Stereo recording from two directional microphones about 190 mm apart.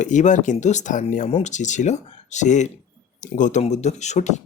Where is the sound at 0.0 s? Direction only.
40° left (ahead or behind).